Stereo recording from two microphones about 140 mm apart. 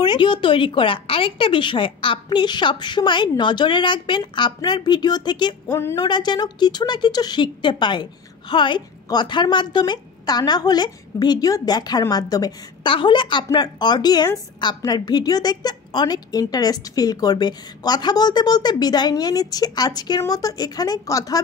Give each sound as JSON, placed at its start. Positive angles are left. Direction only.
{"t": 0.0, "sound": "speech", "side_deg": 30}
{"t": 5.7, "sound": "speech", "side_deg": 20}
{"t": 5.9, "sound": "a woman's voice", "side_deg": 30}